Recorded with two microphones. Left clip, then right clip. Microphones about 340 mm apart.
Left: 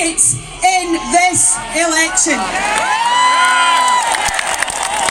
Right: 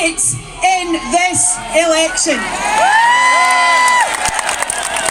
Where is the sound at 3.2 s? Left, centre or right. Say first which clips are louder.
Even; left.